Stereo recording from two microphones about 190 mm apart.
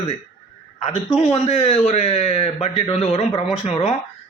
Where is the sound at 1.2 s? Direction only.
35° left (ahead or behind).